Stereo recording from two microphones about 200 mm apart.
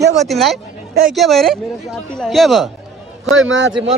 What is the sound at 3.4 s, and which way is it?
Speech, 70° right (ahead or behind).